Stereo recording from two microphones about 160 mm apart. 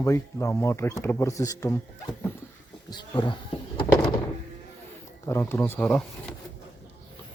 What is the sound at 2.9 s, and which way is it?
Speech, 25° left (ahead or behind).